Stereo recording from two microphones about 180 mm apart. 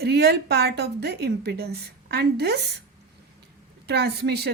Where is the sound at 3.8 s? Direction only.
65° right (ahead or behind).